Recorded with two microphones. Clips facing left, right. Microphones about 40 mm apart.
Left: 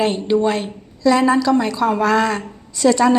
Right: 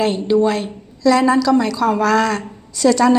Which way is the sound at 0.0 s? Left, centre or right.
Left.